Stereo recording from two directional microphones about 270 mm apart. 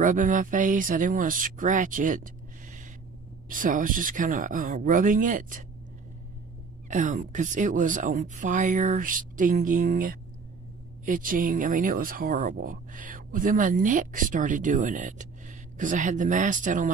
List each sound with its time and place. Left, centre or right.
0.0 s speech: right
3.4 s speech: right
6.9 s speech: right